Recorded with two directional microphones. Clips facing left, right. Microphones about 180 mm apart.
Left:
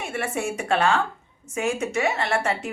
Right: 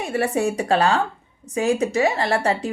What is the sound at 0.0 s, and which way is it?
A woman's voice, 35° right (ahead or behind).